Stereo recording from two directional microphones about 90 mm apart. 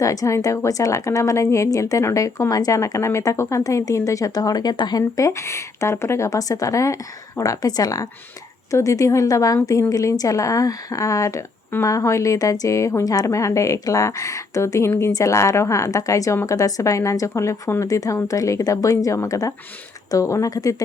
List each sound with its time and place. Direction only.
0.0 s a woman's voice: 40° left (ahead or behind)